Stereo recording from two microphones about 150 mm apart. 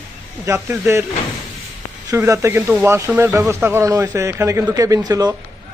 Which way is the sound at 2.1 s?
20° right (ahead or behind).